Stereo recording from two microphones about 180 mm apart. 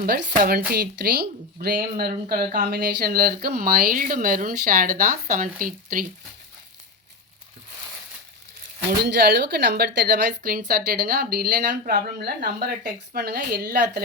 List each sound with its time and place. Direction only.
0.0 s speech: 55° right (ahead or behind)
9.0 s speech: 65° right (ahead or behind)